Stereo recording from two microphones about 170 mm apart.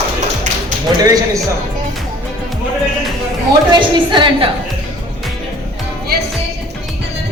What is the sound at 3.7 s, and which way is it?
Speech, 25° right (ahead or behind).